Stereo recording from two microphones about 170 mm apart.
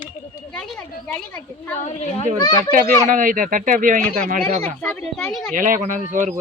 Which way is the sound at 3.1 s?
50° right (ahead or behind).